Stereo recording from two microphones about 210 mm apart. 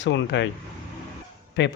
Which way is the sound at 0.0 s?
60° left (ahead or behind).